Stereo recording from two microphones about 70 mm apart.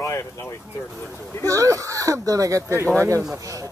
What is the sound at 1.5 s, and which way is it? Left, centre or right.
Speech, right.